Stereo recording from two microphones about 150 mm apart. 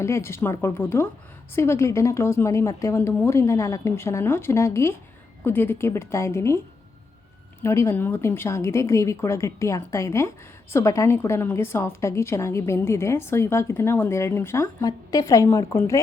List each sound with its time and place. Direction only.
0.0 s a woman's voice: 15° left (ahead or behind)
7.6 s a woman's voice: 20° left (ahead or behind)